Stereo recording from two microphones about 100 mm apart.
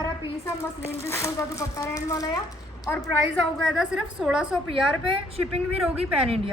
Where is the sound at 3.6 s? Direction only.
5° right (ahead or behind).